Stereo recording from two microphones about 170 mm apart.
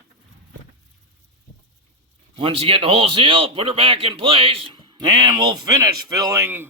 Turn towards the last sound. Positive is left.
turn(degrees=-15)  # may be behind; listen again after turning